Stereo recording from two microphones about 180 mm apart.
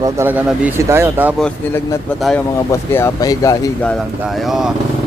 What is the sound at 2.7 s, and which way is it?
Speech, 15° left (ahead or behind).